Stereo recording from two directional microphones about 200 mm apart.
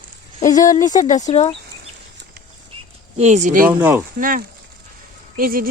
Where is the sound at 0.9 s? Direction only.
40° left (ahead or behind).